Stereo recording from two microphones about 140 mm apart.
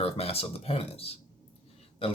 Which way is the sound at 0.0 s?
45° left (ahead or behind).